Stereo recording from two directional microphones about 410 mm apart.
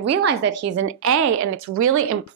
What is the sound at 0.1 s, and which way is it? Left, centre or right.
Speech, right.